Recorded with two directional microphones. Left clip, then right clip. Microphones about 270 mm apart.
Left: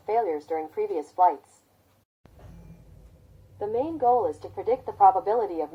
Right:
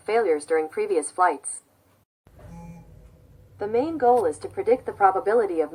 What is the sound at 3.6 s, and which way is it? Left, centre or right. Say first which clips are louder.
A woman's voice: right 3 dB; right.